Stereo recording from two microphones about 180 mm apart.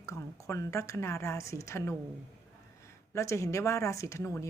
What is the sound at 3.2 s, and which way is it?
A woman's voice, 15° left (ahead or behind).